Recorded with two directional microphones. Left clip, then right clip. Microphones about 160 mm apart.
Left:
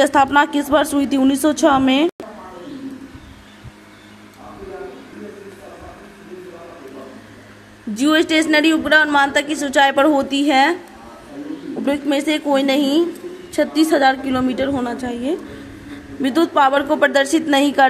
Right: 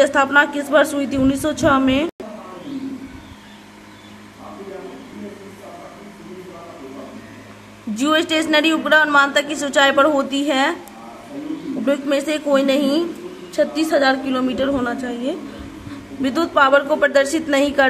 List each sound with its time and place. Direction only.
0.0 s a woman's voice: 30° left (ahead or behind)
7.9 s a woman's voice: 20° left (ahead or behind)
11.8 s a woman's voice: 20° left (ahead or behind)